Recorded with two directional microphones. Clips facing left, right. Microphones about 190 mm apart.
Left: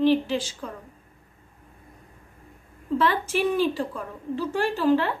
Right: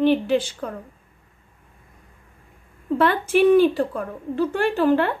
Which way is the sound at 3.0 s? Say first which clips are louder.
Right 7 dB; 60° right (ahead or behind).